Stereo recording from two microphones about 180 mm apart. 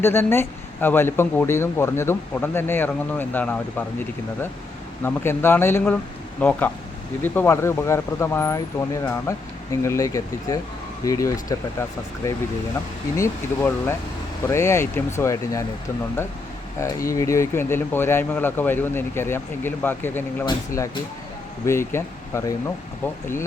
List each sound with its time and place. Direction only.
0.0 s speech: 15° left (ahead or behind)
5.0 s speech: 10° left (ahead or behind)
16.8 s speech: 20° left (ahead or behind)